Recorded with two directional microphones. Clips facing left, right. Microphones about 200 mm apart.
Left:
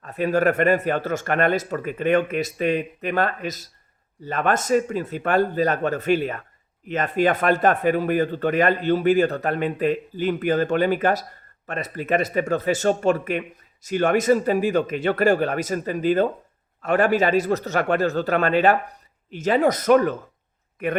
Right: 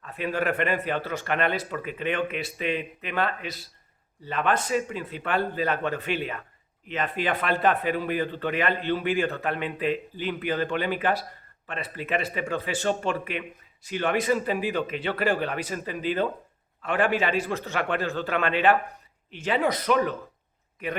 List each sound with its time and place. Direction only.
0.0 s a man's voice: 40° left (ahead or behind)